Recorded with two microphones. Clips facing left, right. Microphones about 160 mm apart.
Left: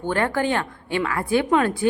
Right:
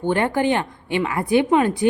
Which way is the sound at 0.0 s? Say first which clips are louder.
Right 3 dB; 15° right (ahead or behind).